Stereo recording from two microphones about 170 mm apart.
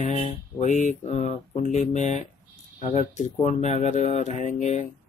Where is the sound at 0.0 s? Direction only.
40° left (ahead or behind).